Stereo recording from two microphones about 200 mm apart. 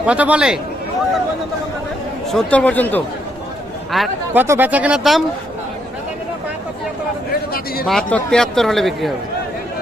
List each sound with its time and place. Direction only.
0.0 s speech: 5° right (ahead or behind)
2.3 s speech: 5° left (ahead or behind)
4.4 s speech: 10° right (ahead or behind)
7.9 s speech: 5° left (ahead or behind)